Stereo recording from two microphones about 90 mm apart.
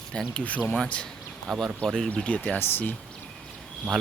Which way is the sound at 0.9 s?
5° left (ahead or behind).